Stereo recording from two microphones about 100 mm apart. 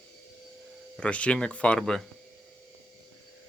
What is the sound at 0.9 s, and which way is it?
Speech, 10° left (ahead or behind).